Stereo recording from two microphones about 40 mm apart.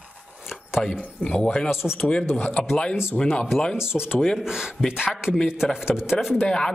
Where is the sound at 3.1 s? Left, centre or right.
Centre.